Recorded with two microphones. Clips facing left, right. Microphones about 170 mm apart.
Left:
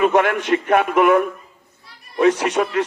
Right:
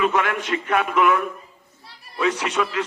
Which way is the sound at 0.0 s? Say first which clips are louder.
Left 5 dB; 50° left (ahead or behind).